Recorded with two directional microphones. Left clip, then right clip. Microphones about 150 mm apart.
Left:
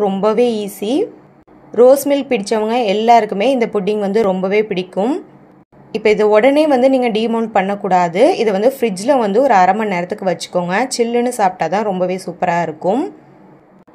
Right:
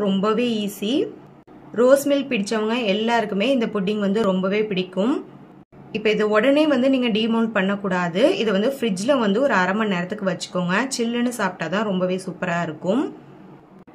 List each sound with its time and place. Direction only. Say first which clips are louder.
0.2 s a woman's voice: left 8 dB; 35° left (ahead or behind)